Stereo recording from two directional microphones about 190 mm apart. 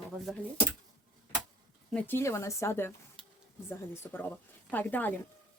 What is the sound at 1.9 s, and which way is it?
Speech, 10° left (ahead or behind).